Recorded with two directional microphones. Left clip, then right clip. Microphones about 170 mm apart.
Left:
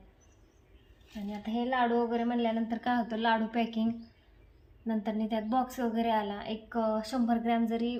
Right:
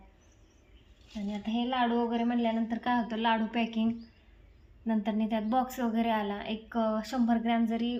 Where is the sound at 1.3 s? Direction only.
15° right (ahead or behind).